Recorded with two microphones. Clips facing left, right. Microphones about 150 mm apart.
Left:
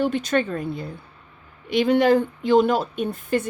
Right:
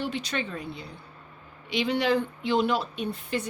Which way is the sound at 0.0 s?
50° left (ahead or behind).